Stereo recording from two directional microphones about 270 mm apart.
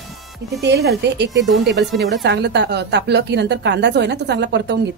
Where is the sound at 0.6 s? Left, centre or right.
Right.